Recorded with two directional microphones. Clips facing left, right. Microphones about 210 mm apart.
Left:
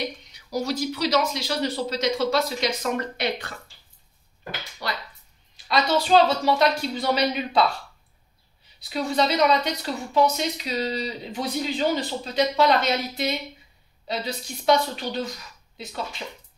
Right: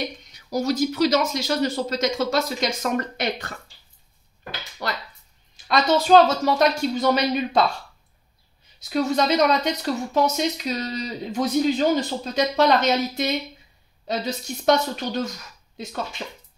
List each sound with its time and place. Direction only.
0.3 s a woman's voice: 45° right (ahead or behind)
4.8 s a woman's voice: 50° right (ahead or behind)
8.7 s a woman's voice: 45° right (ahead or behind)